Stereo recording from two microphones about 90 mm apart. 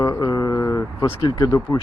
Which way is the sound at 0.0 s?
50° left (ahead or behind).